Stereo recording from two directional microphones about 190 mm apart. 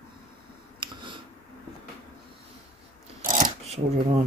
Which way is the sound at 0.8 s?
25° right (ahead or behind).